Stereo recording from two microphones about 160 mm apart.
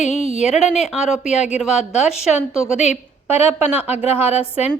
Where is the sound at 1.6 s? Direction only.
5° right (ahead or behind).